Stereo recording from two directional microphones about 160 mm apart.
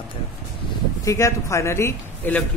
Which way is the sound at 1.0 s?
20° left (ahead or behind).